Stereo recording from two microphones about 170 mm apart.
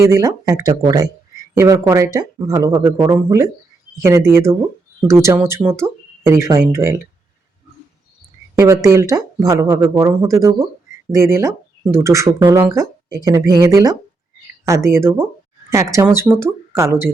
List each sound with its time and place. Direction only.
0.0 s speech: 20° right (ahead or behind)
8.5 s speech: 20° right (ahead or behind)